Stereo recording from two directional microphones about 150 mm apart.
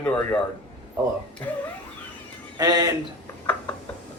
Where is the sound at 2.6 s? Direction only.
25° right (ahead or behind).